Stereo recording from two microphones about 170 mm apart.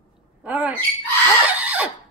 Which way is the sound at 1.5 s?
10° right (ahead or behind).